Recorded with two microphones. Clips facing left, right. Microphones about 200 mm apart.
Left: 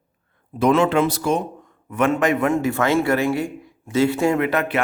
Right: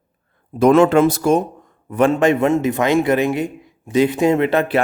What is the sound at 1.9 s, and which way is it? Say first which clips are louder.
A man's voice: right 4 dB; 30° right (ahead or behind).